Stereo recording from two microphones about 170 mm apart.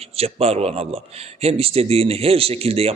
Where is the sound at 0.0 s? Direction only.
35° right (ahead or behind).